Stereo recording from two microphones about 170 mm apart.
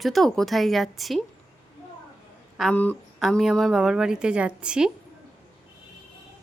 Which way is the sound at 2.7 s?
10° left (ahead or behind).